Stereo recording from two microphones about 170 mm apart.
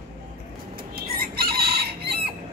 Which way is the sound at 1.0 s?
60° right (ahead or behind).